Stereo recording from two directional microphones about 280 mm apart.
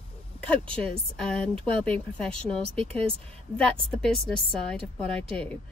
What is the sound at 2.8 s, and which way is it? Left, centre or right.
Speech, right.